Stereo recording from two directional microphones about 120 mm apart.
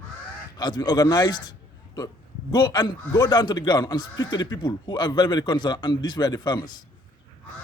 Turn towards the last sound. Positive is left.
turn(degrees=35)  # may be behind; listen again after turning